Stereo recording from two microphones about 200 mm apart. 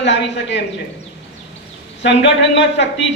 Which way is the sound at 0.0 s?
60° left (ahead or behind).